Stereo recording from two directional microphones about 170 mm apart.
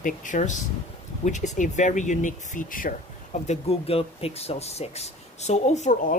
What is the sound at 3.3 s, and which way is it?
Speech, 40° left (ahead or behind).